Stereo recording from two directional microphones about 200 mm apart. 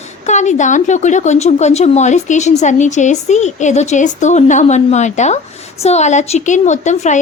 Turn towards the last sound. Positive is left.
turn(degrees=35)  # may be behind; listen again after turning